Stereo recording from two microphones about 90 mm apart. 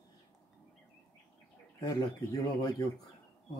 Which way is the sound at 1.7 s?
45° left (ahead or behind).